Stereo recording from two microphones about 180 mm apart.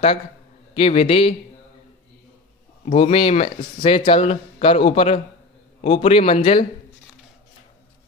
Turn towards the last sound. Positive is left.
turn(degrees=30)  # may be behind; listen again after turning